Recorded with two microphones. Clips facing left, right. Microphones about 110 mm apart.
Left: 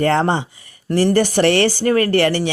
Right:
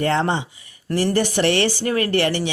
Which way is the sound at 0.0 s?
45° left (ahead or behind).